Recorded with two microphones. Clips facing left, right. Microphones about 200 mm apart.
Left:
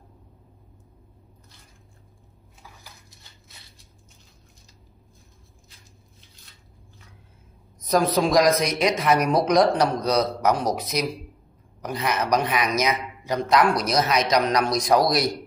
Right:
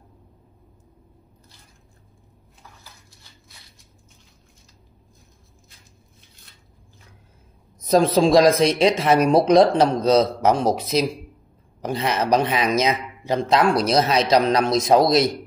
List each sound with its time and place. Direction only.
7.8 s a man's voice: 25° right (ahead or behind)